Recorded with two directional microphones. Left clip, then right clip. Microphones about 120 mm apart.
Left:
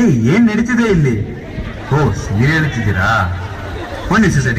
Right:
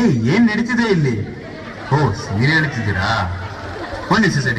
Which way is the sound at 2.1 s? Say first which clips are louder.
Left 1 dB; 30° left (ahead or behind).